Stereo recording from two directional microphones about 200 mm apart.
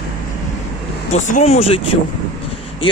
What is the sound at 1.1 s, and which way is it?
Speech, 35° left (ahead or behind).